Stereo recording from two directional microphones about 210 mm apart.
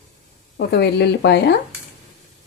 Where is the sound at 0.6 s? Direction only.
50° left (ahead or behind).